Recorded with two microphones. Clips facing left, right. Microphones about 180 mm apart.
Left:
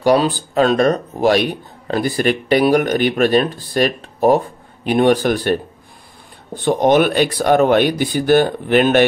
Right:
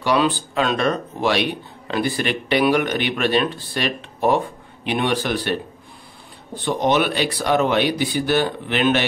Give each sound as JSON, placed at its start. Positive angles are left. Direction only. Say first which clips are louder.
{"t": 0.0, "sound": "speech", "louder": "left 5 dB", "side_deg": 40}